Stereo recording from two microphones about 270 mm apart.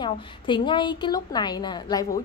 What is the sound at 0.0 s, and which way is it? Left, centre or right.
A woman's voice, centre.